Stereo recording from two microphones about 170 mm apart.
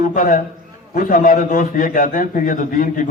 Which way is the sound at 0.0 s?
55° left (ahead or behind).